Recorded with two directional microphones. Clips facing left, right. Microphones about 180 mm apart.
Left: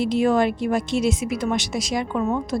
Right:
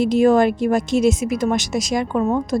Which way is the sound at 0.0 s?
45° right (ahead or behind).